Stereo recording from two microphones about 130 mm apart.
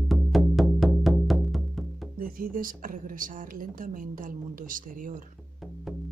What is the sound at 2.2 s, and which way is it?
A woman's voice, 90° right.